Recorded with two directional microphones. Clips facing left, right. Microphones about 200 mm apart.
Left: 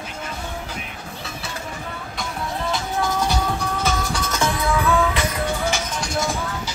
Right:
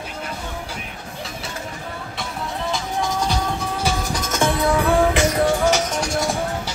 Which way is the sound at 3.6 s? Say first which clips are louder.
Even; 10° right (ahead or behind).